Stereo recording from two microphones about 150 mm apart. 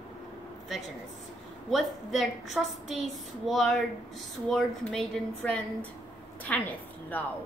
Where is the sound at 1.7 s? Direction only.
Centre (ahead or behind).